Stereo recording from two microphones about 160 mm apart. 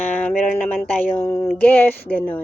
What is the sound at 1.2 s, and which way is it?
Speech, 15° left (ahead or behind).